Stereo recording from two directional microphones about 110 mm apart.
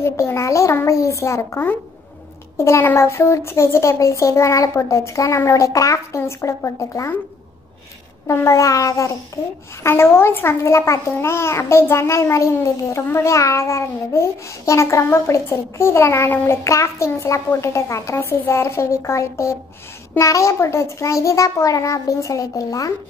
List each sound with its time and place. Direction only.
0.0 s a child's voice: 25° left (ahead or behind)
8.3 s a child's voice: 25° left (ahead or behind)